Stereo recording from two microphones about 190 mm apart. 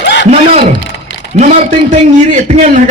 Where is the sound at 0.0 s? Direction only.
65° left (ahead or behind).